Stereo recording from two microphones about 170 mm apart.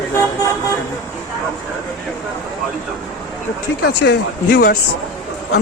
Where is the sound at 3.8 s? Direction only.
90° left.